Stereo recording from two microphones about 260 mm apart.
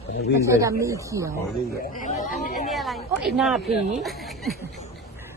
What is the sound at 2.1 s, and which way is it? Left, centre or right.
Speech, left.